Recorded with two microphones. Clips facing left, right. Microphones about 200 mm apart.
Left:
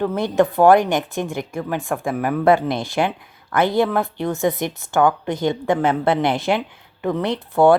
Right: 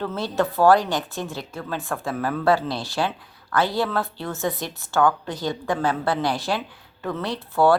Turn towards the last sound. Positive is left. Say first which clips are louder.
# left 4 dB
turn(degrees=20)  # may be behind; listen again after turning